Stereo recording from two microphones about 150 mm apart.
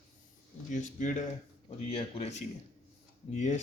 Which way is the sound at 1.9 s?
40° left (ahead or behind).